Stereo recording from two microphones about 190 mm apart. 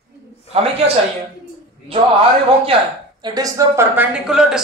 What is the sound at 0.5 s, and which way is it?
Speech, 30° right (ahead or behind).